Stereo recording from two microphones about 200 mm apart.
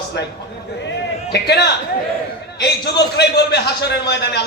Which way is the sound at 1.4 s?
55° left (ahead or behind).